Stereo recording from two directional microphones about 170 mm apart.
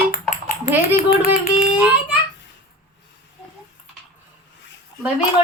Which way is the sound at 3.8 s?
40° left (ahead or behind).